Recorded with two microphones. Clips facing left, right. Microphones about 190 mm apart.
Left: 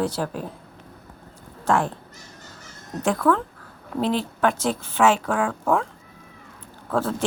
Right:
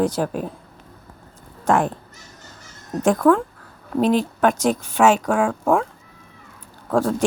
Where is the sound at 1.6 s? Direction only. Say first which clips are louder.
Right 3 dB; 15° right (ahead or behind).